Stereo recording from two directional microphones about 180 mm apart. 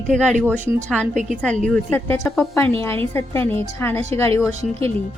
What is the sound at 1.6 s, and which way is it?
A woman's voice, 10° left (ahead or behind).